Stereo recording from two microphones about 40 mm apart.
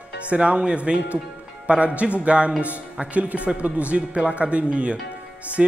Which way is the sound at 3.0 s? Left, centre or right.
Right.